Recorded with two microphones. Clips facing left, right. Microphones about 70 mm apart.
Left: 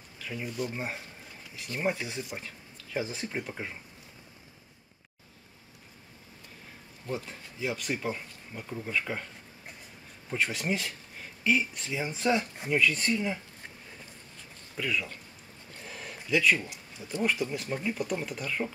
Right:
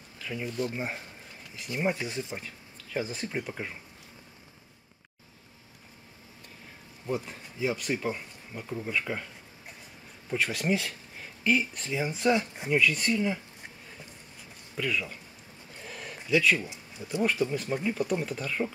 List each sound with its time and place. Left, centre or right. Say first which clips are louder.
0.2 s speech: right 2 dB; centre
0.7 s a sound: right 1 dB; centre
1.7 s speech: right 1 dB; centre
2.3 s speech: right 1 dB; centre
7.1 s speech: right 3 dB; centre
10.3 s speech: right 2 dB; centre
14.8 s speech: right 1 dB; centre
15.8 s a sound: right 1 dB; centre
16.3 s speech: right 1 dB; centre
16.6 s speech: right 2 dB; right
17.6 s speech: right 3 dB; centre